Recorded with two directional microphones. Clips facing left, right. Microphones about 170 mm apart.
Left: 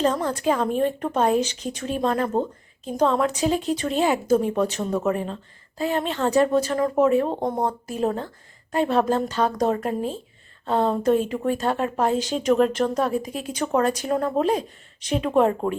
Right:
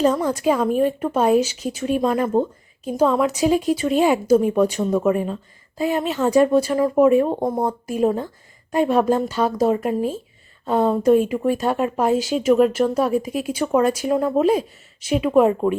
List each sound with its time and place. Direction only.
0.0 s speech: 10° right (ahead or behind)